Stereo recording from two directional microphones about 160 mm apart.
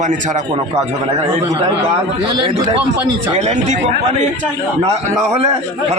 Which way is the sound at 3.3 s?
45° right (ahead or behind).